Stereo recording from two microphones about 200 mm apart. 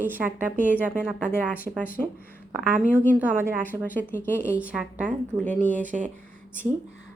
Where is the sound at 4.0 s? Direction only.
10° left (ahead or behind).